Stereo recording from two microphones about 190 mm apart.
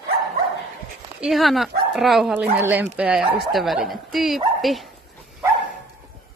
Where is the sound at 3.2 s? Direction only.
25° right (ahead or behind).